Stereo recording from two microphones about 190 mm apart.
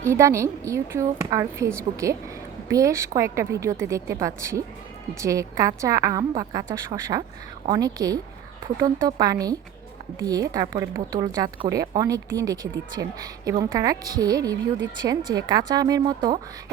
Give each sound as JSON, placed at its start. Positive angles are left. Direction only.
{"t": 0.0, "sound": "a woman's voice", "side_deg": -15}